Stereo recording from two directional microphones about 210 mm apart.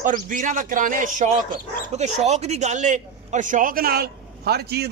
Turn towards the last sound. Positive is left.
turn(degrees=-50)  # may be behind; listen again after turning